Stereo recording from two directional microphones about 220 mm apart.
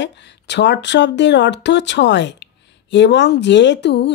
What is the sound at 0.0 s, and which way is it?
Speech, 50° left (ahead or behind).